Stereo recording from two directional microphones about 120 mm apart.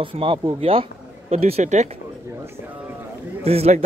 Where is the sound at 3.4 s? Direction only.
55° right (ahead or behind).